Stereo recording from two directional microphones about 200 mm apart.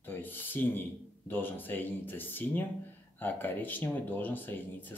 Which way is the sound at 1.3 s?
10° left (ahead or behind).